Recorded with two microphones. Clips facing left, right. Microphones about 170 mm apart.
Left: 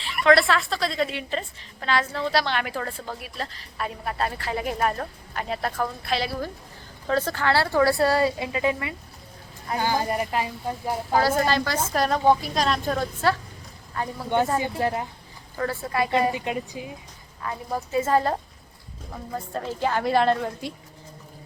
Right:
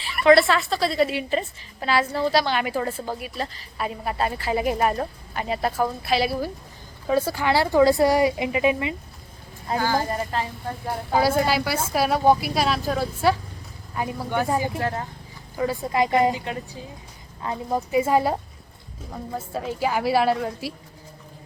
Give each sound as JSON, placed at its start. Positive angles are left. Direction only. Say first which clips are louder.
{"t": 0.0, "sound": "a woman's voice", "louder": "right 3 dB", "side_deg": -5}
{"t": 9.7, "sound": "speech", "louder": "right 1 dB", "side_deg": 20}
{"t": 11.1, "sound": "a woman's voice", "louder": "right 1 dB", "side_deg": -10}
{"t": 14.8, "sound": "speech", "louder": "left 2 dB", "side_deg": 15}
{"t": 15.5, "sound": "a woman's voice", "louder": "right 3 dB", "side_deg": -15}
{"t": 16.3, "sound": "speech", "louder": "left 2 dB", "side_deg": 15}
{"t": 17.4, "sound": "a woman's voice", "louder": "right 4 dB", "side_deg": -20}